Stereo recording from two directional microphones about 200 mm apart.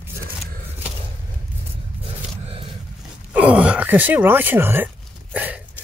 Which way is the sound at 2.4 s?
25° right (ahead or behind).